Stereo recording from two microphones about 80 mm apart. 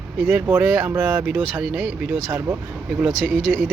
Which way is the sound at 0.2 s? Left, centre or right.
Right.